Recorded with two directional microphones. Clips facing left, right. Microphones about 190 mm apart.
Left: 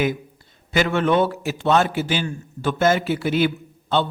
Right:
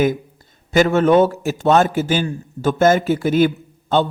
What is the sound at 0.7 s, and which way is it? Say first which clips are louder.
A man's voice: right 6 dB; 45° right (ahead or behind).